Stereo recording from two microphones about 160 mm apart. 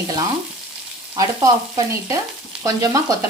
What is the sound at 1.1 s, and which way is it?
Speech, 20° right (ahead or behind).